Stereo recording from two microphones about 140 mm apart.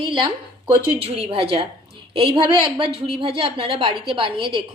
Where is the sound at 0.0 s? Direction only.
35° right (ahead or behind).